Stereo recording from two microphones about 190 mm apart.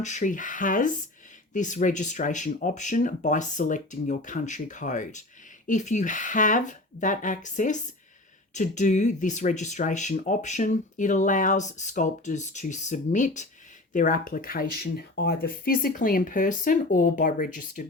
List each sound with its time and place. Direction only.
0.0 s speech: 40° left (ahead or behind)